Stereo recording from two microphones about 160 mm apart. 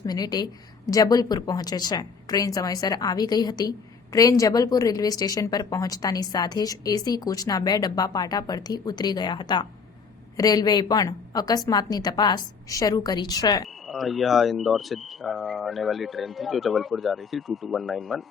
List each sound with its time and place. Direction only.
0.0 s a woman's voice: 25° left (ahead or behind)
13.8 s speech: centre (ahead or behind)